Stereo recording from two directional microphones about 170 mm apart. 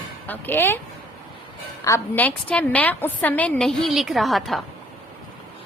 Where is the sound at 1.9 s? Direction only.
15° left (ahead or behind).